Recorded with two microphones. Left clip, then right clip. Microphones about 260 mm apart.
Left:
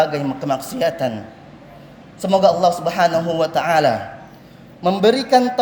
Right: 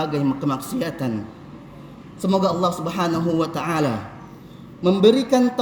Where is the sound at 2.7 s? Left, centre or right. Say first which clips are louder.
Left 7 dB; centre.